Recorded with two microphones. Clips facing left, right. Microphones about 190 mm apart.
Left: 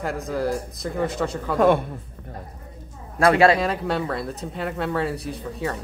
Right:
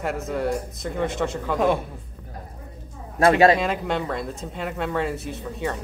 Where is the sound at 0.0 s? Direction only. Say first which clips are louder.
Even; centre (ahead or behind).